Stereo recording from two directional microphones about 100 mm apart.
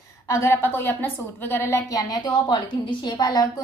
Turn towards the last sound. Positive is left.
turn(degrees=45)  # may be behind; listen again after turning